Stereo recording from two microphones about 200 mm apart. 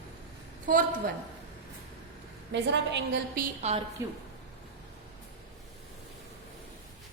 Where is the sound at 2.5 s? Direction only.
60° right (ahead or behind).